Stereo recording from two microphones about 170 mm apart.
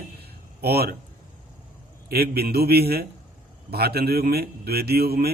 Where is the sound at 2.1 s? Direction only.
65° right (ahead or behind).